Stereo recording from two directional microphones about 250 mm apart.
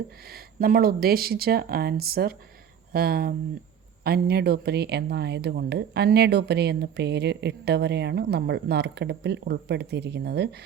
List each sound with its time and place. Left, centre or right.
0.3 s speech: right